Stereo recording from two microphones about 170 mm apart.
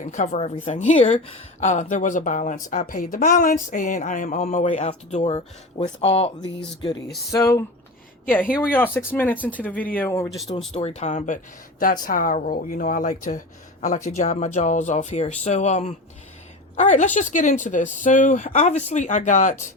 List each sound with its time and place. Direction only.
0.0 s speech: 45° left (ahead or behind)
8.6 s speech: 10° left (ahead or behind)
10.8 s speech: 40° left (ahead or behind)